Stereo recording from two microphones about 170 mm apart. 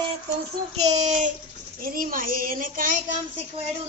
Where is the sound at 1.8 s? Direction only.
55° right (ahead or behind).